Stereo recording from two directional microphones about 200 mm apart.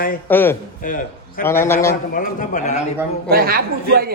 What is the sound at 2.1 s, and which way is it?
Speech, 40° left (ahead or behind).